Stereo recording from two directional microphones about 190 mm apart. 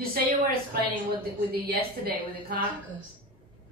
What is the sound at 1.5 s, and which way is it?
A woman's voice, 50° right (ahead or behind).